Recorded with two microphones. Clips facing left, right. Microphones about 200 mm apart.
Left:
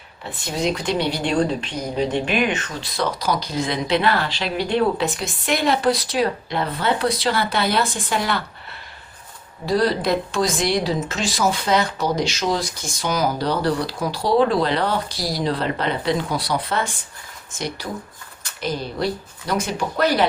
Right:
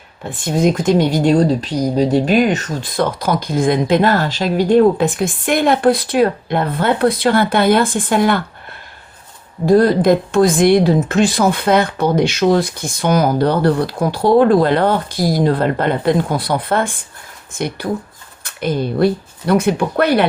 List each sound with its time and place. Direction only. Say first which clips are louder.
0.2 s speech: right 8 dB; 50° right (ahead or behind)
9.6 s speech: right 9 dB; 50° right (ahead or behind)